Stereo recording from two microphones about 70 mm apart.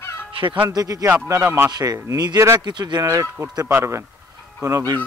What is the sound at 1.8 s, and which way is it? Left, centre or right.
Speech, right.